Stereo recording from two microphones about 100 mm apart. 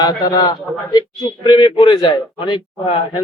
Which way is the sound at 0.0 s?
45° left (ahead or behind).